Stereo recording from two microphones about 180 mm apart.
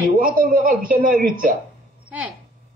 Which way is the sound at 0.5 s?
50° right (ahead or behind).